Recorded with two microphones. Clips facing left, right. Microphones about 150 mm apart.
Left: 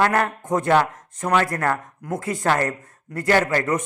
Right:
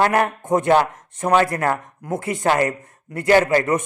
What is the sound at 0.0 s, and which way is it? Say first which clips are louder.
A man's voice: right 2 dB; 20° right (ahead or behind).